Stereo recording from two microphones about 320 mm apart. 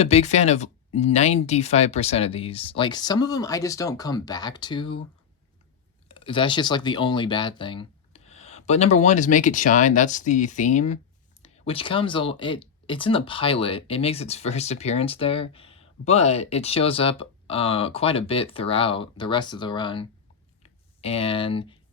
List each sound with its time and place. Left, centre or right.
0.0 s speech: centre
6.1 s speech: centre
20.6 s a sound: centre